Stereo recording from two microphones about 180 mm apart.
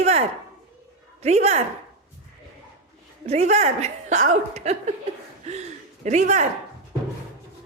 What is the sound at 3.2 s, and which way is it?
Speech, 40° right (ahead or behind).